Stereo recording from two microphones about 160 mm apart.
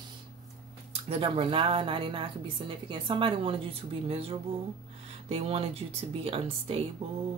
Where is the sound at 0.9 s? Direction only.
35° right (ahead or behind).